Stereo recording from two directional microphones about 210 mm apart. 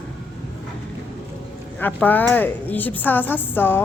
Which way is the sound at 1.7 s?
10° left (ahead or behind).